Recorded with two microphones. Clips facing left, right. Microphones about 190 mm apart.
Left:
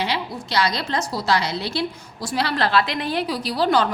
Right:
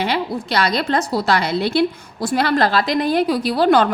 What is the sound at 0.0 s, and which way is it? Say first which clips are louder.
A woman's voice: right 5 dB; 55° right (ahead or behind).